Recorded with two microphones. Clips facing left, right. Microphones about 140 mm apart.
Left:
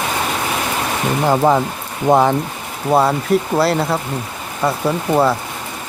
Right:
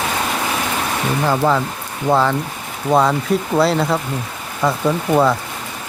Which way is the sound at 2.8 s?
5° left (ahead or behind).